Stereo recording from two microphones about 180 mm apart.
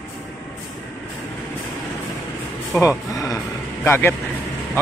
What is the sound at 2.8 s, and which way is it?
Music, 20° left (ahead or behind).